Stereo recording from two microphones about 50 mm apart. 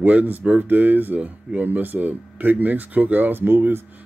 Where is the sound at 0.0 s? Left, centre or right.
Right.